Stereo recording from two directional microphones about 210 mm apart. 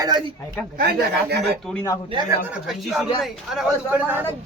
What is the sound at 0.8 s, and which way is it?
Speech, 45° right (ahead or behind).